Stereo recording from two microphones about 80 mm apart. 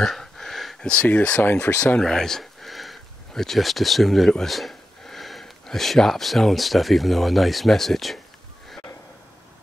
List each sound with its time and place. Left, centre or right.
0.0 s a sound: centre
0.8 s speech: centre
2.0 s speech: centre